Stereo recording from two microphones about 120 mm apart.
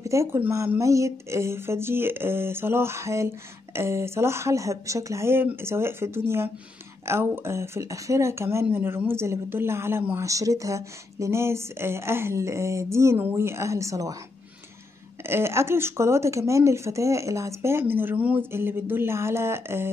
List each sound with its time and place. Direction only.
0.0 s speech: 25° right (ahead or behind)
15.2 s speech: 20° right (ahead or behind)